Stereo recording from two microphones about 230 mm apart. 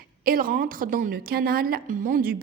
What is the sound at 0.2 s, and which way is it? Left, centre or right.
A woman's voice, right.